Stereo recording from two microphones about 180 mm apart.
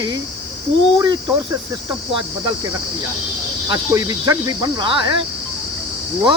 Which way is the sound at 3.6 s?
20° right (ahead or behind).